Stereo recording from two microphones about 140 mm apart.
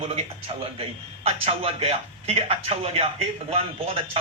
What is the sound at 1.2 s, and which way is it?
Speech, 45° right (ahead or behind).